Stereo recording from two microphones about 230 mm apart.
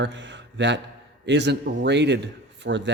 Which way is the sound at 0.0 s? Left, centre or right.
Right.